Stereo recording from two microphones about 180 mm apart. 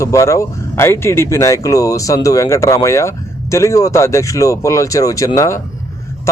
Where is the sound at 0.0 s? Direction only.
15° left (ahead or behind).